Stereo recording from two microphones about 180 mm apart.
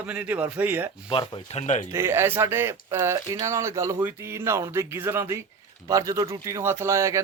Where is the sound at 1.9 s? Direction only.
15° right (ahead or behind).